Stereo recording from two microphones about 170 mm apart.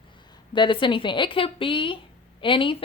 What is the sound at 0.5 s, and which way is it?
A woman's voice, 30° left (ahead or behind).